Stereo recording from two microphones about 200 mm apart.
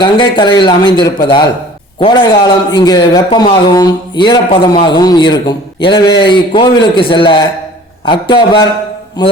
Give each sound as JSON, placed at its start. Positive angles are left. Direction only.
{"t": 0.0, "sound": "speech", "side_deg": 25}